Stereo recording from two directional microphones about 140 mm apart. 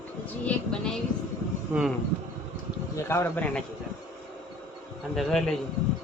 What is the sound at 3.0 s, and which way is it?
Speech, 20° left (ahead or behind).